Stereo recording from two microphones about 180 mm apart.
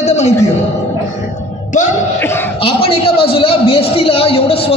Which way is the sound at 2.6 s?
30° left (ahead or behind).